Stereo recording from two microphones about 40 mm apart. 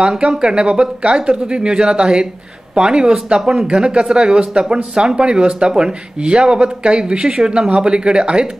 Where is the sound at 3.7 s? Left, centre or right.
Right.